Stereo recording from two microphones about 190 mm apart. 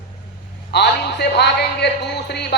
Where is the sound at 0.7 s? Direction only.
60° left (ahead or behind).